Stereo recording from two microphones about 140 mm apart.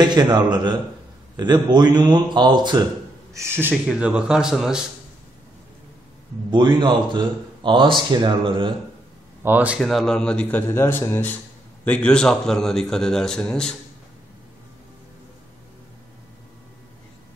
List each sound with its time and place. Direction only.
0.0 s speech: 30° right (ahead or behind)
3.3 s speech: 15° right (ahead or behind)
6.5 s speech: 30° right (ahead or behind)
9.4 s speech: 10° right (ahead or behind)
9.8 s speech: centre (ahead or behind)